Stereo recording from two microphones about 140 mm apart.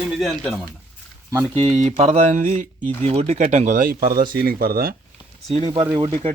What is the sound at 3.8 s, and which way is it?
Speech, 90° right.